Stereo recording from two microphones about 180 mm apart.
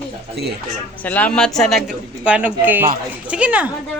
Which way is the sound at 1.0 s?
10° left (ahead or behind).